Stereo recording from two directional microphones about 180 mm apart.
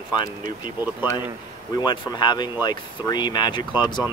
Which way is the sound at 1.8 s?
25° left (ahead or behind).